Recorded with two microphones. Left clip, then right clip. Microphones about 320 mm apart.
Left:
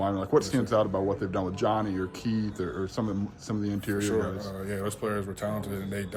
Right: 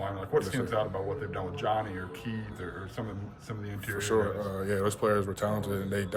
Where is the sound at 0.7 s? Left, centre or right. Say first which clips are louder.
Left 8 dB; centre.